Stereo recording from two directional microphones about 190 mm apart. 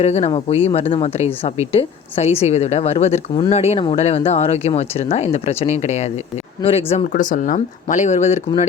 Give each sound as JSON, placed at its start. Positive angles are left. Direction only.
{"t": 0.0, "sound": "speech", "side_deg": 35}
{"t": 7.1, "sound": "speech", "side_deg": 45}